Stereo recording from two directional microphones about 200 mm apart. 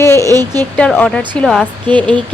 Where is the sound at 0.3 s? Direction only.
20° right (ahead or behind).